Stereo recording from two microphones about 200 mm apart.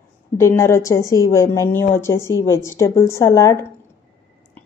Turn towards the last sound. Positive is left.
turn(degrees=15)  # may be behind; listen again after turning